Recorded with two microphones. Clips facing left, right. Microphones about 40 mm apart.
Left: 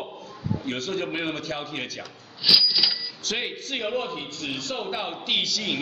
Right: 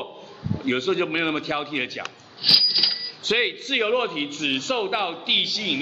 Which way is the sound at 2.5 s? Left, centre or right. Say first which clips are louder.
Even; centre.